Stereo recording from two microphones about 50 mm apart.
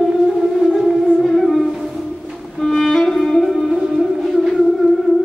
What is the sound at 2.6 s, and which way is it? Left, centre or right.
Music, centre.